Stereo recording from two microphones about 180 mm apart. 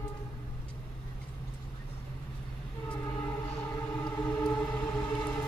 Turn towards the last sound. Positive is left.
turn(degrees=5)  # may be behind; listen again after turning